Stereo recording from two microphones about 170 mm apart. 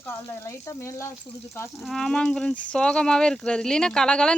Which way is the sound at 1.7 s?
5° left (ahead or behind).